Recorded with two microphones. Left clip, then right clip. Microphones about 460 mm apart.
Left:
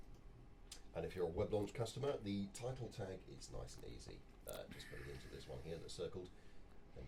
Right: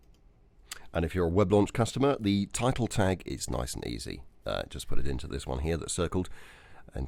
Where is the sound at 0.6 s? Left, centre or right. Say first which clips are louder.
Right 14 dB; right.